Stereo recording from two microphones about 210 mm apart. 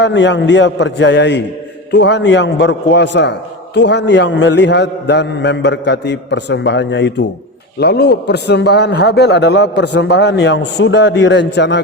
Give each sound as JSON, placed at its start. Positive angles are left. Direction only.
{"t": 0.0, "sound": "a man's voice", "side_deg": 60}